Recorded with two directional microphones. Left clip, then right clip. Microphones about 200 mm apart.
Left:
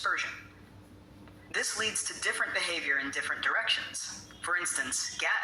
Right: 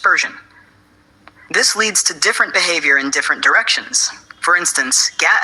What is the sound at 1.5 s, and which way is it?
Speech, 45° right (ahead or behind).